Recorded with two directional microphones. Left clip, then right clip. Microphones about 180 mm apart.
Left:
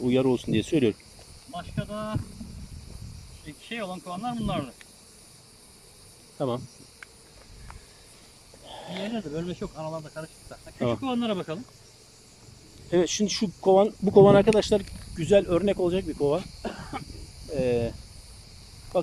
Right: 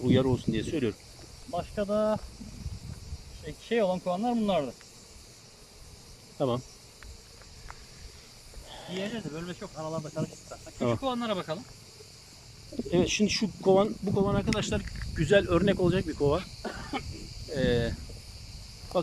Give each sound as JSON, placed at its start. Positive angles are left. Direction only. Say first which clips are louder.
{"t": 0.0, "sound": "speech", "louder": "left 3 dB", "side_deg": 10}
{"t": 1.5, "sound": "speech", "louder": "right 6 dB", "side_deg": -40}
{"t": 3.4, "sound": "speech", "louder": "right 8 dB", "side_deg": -30}
{"t": 6.4, "sound": "speech", "louder": "even", "side_deg": 0}
{"t": 8.6, "sound": "snake", "louder": "left 4 dB", "side_deg": 10}
{"t": 9.0, "sound": "speech", "louder": "left 2 dB", "side_deg": 5}
{"t": 9.3, "sound": "speech", "louder": "left 5 dB", "side_deg": 15}
{"t": 9.8, "sound": "speech", "louder": "right 4 dB", "side_deg": 0}
{"t": 12.9, "sound": "speech", "louder": "left 2 dB", "side_deg": 0}
{"t": 14.3, "sound": "speech", "louder": "left 13 dB", "side_deg": 55}
{"t": 15.1, "sound": "speech", "louder": "left 3 dB", "side_deg": 5}